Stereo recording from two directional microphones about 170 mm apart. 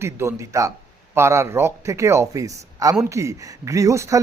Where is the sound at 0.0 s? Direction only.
15° right (ahead or behind).